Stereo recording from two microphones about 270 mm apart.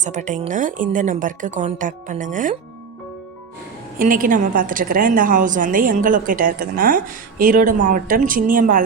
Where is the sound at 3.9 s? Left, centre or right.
Right.